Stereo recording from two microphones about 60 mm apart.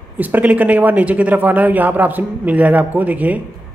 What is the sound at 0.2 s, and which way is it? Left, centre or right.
Speech, right.